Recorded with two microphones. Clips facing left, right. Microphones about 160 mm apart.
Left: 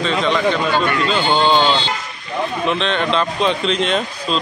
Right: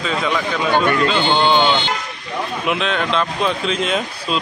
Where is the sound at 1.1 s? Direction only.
5° left (ahead or behind).